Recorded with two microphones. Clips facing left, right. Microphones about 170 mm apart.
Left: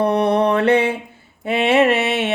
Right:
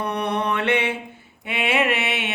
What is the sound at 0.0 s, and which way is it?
Mantra, 30° left (ahead or behind).